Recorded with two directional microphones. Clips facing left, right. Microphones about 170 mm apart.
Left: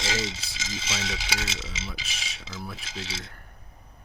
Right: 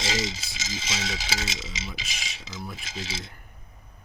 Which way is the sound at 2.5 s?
Centre (ahead or behind).